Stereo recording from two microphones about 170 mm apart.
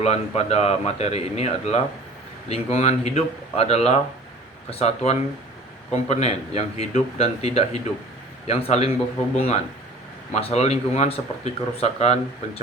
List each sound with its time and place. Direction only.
0.0 s speech: 40° left (ahead or behind)